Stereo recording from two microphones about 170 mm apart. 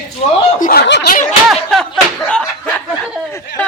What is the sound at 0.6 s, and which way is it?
Speech, 65° left (ahead or behind).